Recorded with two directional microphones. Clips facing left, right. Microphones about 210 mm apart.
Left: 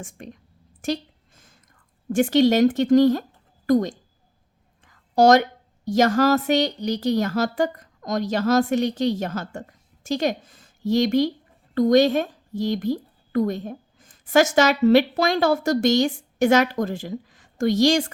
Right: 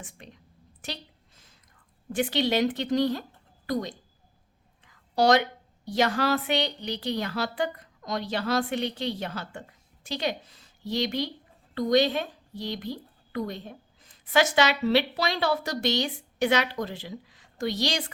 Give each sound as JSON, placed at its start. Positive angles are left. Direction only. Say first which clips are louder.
{"t": 0.0, "sound": "a woman's voice", "louder": "left 8 dB", "side_deg": 45}
{"t": 2.1, "sound": "a woman's voice", "louder": "left 8 dB", "side_deg": 45}